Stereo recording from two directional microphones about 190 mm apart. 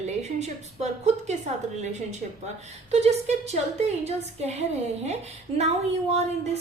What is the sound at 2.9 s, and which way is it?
A woman's voice, 35° right (ahead or behind).